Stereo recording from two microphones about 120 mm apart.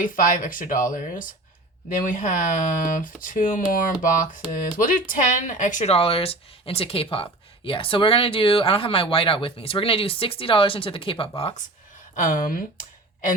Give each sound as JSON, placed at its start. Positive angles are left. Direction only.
{"t": 0.0, "sound": "speech", "side_deg": 90}
{"t": 5.9, "sound": "speech", "side_deg": 50}
{"t": 12.1, "sound": "speech", "side_deg": 90}